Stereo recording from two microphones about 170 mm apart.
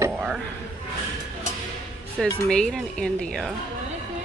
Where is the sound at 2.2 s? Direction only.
5° left (ahead or behind).